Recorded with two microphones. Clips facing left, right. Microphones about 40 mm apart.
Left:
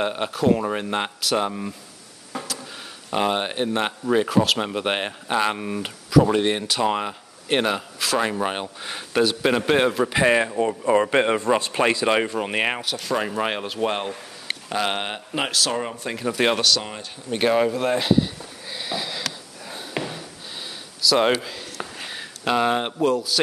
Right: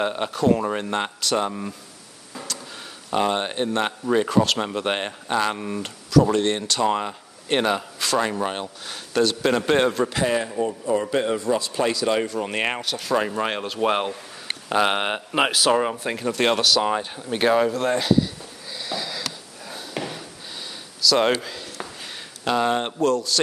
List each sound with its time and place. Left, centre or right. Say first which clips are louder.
0.0 s speech: even; centre
3.1 s speech: even; centre
10.2 s a man's voice: left 6 dB; left
10.6 s speech: left 3 dB; left
11.1 s a man's voice: left 3 dB; left
12.4 s speech: left 1 dB; centre
13.8 s speech: right 4 dB; centre
16.3 s speech: even; centre
17.3 s speech: even; centre
18.1 s sniff: even; left
19.6 s a sound: left 1 dB; centre
21.0 s speech: even; centre